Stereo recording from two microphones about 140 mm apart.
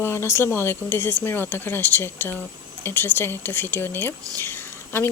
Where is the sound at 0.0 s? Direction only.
15° left (ahead or behind).